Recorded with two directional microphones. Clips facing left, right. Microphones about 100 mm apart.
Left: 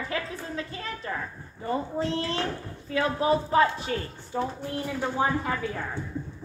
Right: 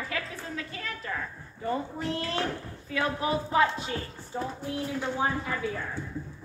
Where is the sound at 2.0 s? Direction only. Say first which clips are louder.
Left 2 dB; 30° left (ahead or behind).